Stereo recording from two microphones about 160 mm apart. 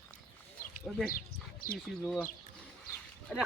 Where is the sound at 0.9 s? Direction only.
Centre (ahead or behind).